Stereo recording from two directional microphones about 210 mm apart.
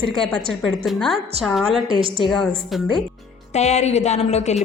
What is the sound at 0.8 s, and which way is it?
Speech, centre (ahead or behind).